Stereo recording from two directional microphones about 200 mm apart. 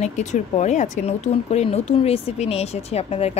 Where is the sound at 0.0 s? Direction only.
35° left (ahead or behind).